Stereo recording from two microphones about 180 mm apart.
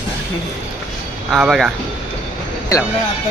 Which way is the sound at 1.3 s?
Centre (ahead or behind).